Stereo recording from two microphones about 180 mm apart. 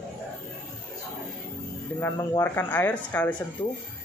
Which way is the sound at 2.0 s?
10° left (ahead or behind).